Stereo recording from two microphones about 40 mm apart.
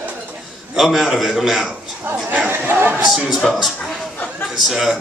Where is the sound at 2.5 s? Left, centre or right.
Right.